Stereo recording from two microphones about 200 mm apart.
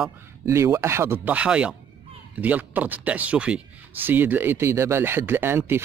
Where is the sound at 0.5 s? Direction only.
15° right (ahead or behind).